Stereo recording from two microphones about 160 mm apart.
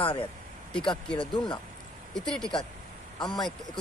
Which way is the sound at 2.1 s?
5° left (ahead or behind).